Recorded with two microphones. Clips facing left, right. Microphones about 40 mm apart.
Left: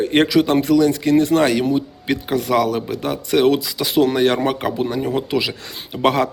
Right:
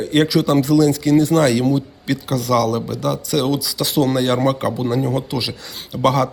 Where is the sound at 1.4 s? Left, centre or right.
Centre.